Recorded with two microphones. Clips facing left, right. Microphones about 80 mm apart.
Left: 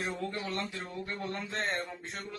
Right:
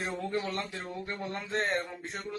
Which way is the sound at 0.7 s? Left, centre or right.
Right.